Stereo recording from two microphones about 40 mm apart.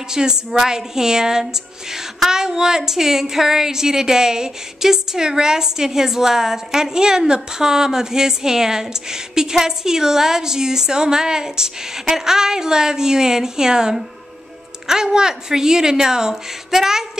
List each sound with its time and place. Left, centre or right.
0.1 s a woman's voice: centre